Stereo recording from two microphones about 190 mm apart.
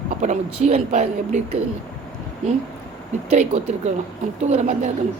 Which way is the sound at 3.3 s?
35° right (ahead or behind).